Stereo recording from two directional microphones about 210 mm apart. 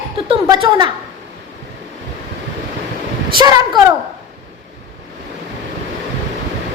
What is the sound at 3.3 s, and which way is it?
Speech, 20° right (ahead or behind).